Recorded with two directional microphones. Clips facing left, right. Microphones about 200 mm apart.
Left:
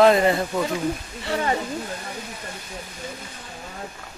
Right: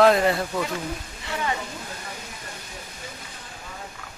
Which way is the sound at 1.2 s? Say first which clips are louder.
Left 5 dB; 35° left (ahead or behind).